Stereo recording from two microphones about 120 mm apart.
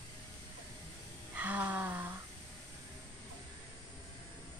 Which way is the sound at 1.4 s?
15° right (ahead or behind).